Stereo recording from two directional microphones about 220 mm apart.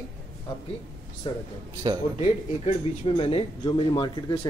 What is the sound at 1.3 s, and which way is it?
Speech, 20° left (ahead or behind).